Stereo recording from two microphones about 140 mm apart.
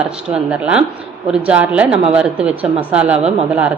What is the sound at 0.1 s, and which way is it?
A woman's voice, 5° right (ahead or behind).